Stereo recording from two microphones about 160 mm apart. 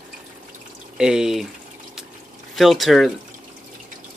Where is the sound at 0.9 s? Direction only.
5° right (ahead or behind).